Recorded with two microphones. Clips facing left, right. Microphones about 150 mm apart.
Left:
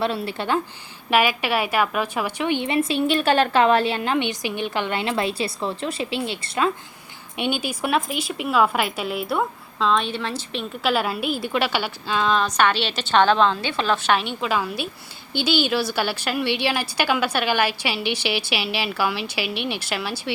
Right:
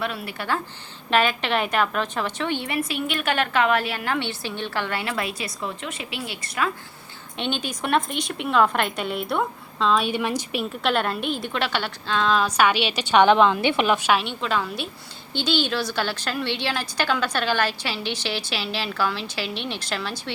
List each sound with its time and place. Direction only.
0.0 s a woman's voice: 30° left (ahead or behind)
1.1 s a woman's voice: 10° left (ahead or behind); by 6.7 s 25° left (ahead or behind)
7.3 s a woman's voice: 10° left (ahead or behind)